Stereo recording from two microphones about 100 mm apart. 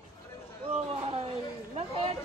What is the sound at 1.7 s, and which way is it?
Speech, 80° right.